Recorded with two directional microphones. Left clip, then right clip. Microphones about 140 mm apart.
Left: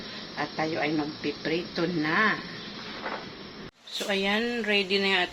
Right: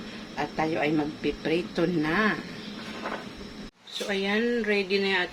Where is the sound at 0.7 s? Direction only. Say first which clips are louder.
Right 2 dB; 25° right (ahead or behind).